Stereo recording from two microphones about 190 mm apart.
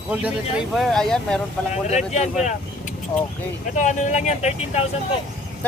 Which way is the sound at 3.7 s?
40° left (ahead or behind).